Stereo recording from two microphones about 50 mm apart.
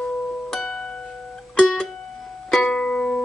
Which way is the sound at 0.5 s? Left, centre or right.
Centre.